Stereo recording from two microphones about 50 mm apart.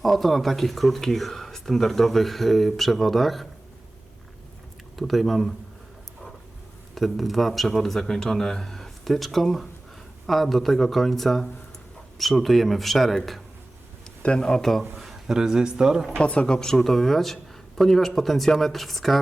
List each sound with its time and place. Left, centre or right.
0.0 s speech: centre
4.9 s speech: centre
6.9 s speech: centre
14.2 s a man's voice: centre
16.1 s speech: left
16.6 s speech: centre